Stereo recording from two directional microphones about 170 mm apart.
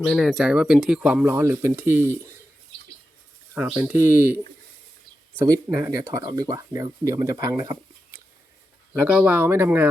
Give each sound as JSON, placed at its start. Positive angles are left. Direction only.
{"t": 0.1, "sound": "speech", "side_deg": 0}
{"t": 3.5, "sound": "speech", "side_deg": -10}
{"t": 5.7, "sound": "speech", "side_deg": -20}
{"t": 8.9, "sound": "speech", "side_deg": -5}